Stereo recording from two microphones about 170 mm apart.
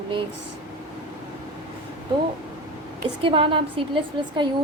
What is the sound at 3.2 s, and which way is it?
A woman's voice, 30° right (ahead or behind).